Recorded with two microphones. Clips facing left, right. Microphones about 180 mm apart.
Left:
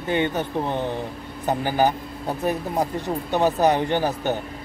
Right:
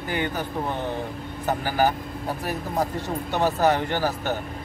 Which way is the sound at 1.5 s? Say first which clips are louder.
Left 2 dB; 20° left (ahead or behind).